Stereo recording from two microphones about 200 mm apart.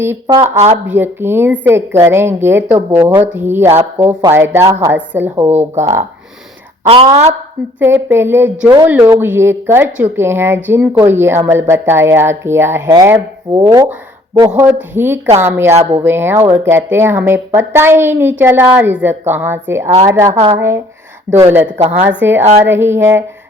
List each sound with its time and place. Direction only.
0.0 s a woman's voice: 15° right (ahead or behind)
6.8 s a woman's voice: 30° right (ahead or behind)
7.8 s a woman's voice: 10° right (ahead or behind)